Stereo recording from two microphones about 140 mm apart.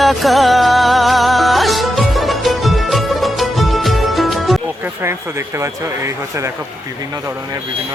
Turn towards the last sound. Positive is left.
turn(degrees=-20)  # may be behind; listen again after turning